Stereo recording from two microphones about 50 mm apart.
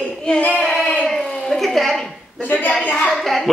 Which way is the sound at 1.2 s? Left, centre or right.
Centre.